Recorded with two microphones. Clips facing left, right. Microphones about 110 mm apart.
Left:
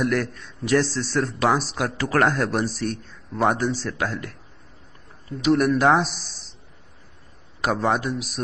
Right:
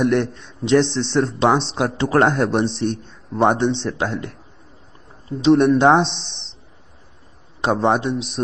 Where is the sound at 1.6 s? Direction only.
25° right (ahead or behind).